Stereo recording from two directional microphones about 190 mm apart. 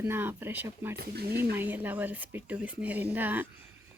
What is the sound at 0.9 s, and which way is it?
Speech, 55° right (ahead or behind).